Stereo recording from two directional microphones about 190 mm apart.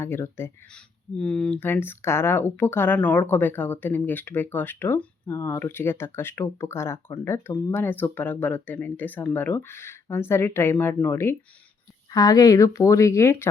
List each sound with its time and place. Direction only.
0.0 s speech: 10° left (ahead or behind)